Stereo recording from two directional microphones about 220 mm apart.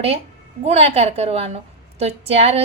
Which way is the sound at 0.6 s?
25° right (ahead or behind).